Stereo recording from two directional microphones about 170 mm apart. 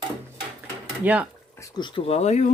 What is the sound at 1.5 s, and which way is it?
Speech, 20° left (ahead or behind).